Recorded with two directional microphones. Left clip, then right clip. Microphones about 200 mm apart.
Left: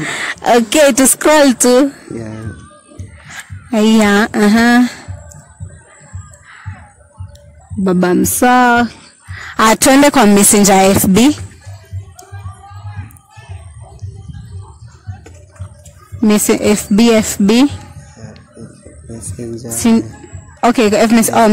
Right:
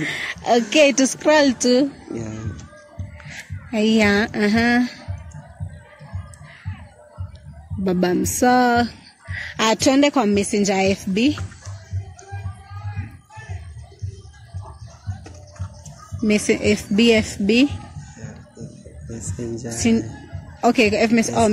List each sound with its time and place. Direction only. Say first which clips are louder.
0.0 s speech: left 8 dB; 40° left (ahead or behind)
3.7 s a woman's voice: left 6 dB; 40° left (ahead or behind)
7.8 s a woman's voice: left 7 dB; 35° left (ahead or behind)
9.6 s a woman's voice: left 8 dB; 50° left (ahead or behind)
16.3 s a woman's voice: left 6 dB; 35° left (ahead or behind)
19.3 s speech: left 4 dB; 15° left (ahead or behind)
19.8 s a woman's voice: left 7 dB; 40° left (ahead or behind)